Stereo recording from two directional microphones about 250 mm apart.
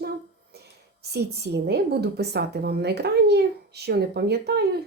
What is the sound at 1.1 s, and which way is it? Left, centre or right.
A woman's voice, right.